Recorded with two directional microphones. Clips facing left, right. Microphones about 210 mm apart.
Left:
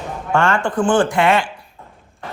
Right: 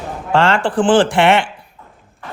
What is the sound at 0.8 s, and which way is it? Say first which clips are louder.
Speech: right 3 dB; 90° right.